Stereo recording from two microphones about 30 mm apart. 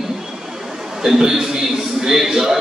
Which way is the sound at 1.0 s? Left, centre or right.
Centre.